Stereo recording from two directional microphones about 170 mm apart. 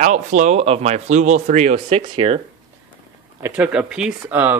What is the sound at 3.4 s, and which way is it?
Speech, 10° right (ahead or behind).